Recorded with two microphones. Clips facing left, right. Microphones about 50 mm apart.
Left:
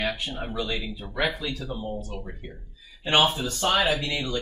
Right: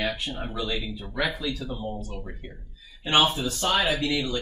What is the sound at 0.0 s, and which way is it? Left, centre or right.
Speech, centre.